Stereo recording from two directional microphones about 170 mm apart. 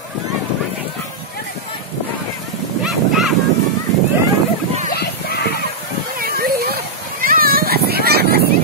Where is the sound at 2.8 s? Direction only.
Centre (ahead or behind).